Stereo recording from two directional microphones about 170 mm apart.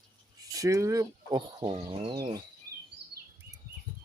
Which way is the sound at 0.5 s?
20° right (ahead or behind).